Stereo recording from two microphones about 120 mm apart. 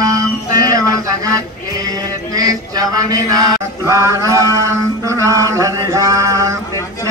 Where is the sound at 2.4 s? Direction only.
30° right (ahead or behind).